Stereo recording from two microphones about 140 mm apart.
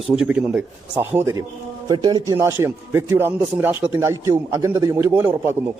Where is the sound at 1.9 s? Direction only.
30° right (ahead or behind).